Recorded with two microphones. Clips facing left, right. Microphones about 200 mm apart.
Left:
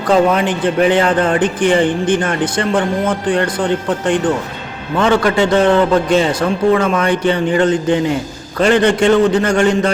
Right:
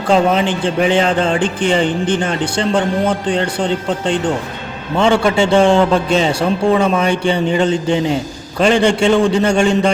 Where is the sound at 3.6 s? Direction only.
25° right (ahead or behind).